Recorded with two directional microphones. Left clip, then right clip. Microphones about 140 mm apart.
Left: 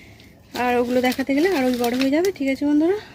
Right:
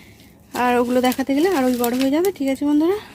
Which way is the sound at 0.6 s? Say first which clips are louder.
Right 2 dB; 30° right (ahead or behind).